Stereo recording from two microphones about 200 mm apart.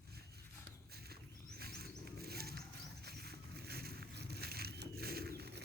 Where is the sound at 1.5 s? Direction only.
50° right (ahead or behind).